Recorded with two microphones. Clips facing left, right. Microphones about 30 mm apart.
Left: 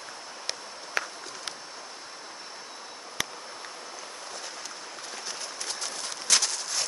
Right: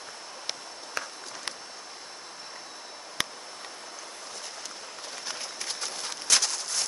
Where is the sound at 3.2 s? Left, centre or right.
Right.